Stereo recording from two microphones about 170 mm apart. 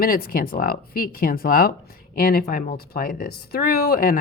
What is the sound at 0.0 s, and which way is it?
Speech, 60° left (ahead or behind).